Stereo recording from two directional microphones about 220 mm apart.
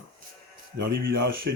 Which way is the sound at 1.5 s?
45° right (ahead or behind).